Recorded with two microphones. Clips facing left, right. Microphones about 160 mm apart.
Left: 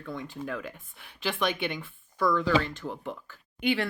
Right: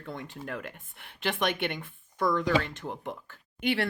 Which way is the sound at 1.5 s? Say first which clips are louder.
Even; 60° right (ahead or behind).